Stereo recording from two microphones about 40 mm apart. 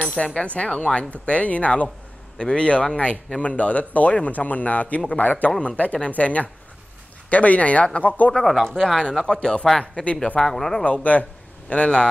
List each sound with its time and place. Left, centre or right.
0.1 s a man's voice: left
8.6 s a man's voice: centre
10.4 s speech: centre
10.8 s speech: left